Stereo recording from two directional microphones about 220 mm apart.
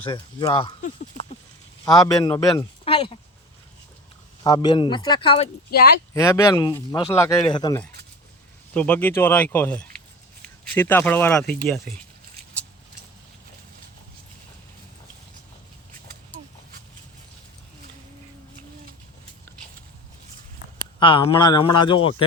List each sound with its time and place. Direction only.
0.0 s speech: 20° left (ahead or behind)
1.8 s speech: 15° left (ahead or behind)
4.4 s speech: 20° left (ahead or behind)
8.7 s speech: 5° left (ahead or behind)
21.0 s speech: 25° left (ahead or behind)